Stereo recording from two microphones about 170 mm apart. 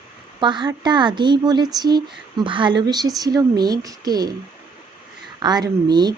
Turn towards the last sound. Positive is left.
turn(degrees=-25)  # may be behind; listen again after turning